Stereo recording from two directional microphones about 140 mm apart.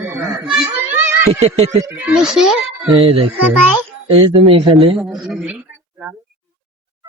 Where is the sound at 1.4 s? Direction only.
50° right (ahead or behind).